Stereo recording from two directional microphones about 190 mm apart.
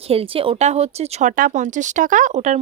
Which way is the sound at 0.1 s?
30° right (ahead or behind).